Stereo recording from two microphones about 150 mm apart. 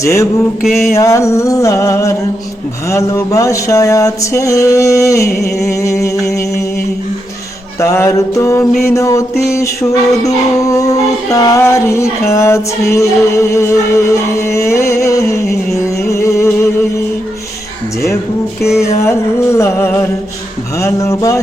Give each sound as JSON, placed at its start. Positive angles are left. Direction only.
{"t": 0.0, "sound": "music", "side_deg": 20}
{"t": 0.6, "sound": "mantra", "side_deg": 0}
{"t": 0.9, "sound": "music", "side_deg": 20}
{"t": 7.8, "sound": "music", "side_deg": 20}
{"t": 10.2, "sound": "music", "side_deg": 20}
{"t": 18.8, "sound": "music", "side_deg": 20}